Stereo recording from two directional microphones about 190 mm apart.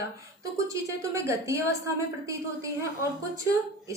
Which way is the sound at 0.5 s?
15° right (ahead or behind).